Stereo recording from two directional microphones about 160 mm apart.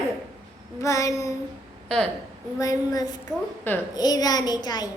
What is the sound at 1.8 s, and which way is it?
Speech, 5° left (ahead or behind).